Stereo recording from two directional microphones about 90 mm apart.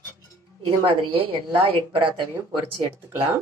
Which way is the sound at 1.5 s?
65° right (ahead or behind).